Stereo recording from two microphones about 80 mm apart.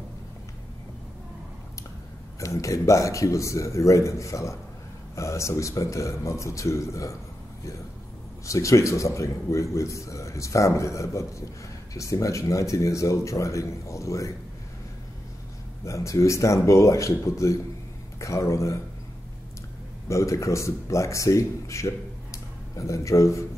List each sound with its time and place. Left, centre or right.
2.4 s speech: left
8.5 s speech: left
15.8 s speech: left
20.1 s speech: left